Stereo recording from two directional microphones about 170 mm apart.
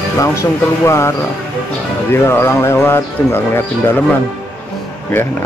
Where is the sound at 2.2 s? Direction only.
15° left (ahead or behind).